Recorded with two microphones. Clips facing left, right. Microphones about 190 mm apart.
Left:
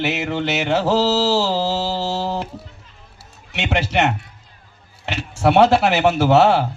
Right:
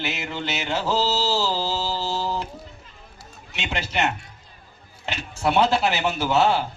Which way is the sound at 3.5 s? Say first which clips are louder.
Left 8 dB; 75° left (ahead or behind).